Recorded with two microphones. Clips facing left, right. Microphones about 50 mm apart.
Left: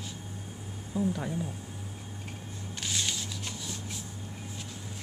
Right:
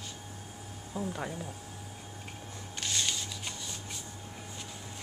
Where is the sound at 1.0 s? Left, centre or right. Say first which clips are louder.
Left 5 dB; centre.